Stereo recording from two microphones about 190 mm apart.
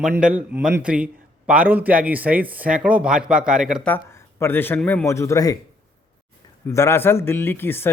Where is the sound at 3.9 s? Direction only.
15° left (ahead or behind).